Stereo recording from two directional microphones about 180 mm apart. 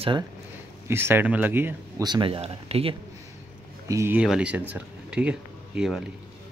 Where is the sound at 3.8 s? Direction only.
15° right (ahead or behind).